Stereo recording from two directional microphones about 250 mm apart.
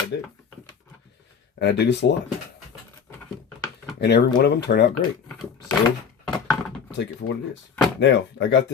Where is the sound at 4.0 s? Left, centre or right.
Left.